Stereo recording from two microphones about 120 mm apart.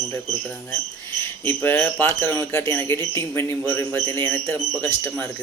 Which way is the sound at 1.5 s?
15° left (ahead or behind).